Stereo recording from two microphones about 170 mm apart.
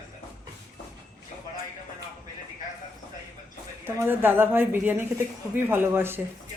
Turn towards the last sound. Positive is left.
turn(degrees=-15)  # may be behind; listen again after turning